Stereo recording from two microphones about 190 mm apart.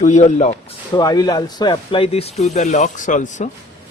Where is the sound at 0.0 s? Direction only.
35° left (ahead or behind).